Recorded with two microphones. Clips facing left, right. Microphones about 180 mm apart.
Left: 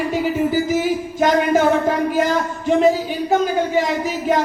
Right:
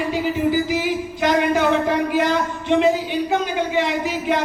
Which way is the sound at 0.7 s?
45° left (ahead or behind).